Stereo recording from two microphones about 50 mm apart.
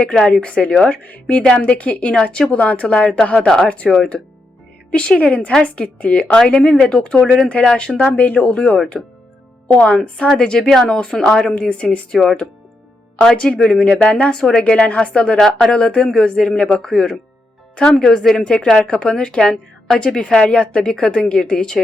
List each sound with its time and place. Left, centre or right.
0.0 s a woman's voice: centre
4.9 s a woman's voice: centre
8.1 s a woman's voice: left
9.8 s a woman's voice: centre
12.1 s speech: centre
13.3 s a woman's voice: left